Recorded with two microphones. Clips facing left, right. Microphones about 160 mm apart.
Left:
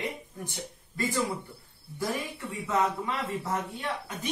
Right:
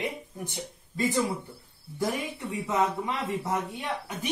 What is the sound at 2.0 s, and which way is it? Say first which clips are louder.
Speech: right 2 dB; 20° right (ahead or behind).